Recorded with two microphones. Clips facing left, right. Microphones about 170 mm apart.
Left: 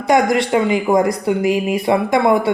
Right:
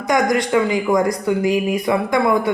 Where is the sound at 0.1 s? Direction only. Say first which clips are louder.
Left 2 dB; 25° left (ahead or behind).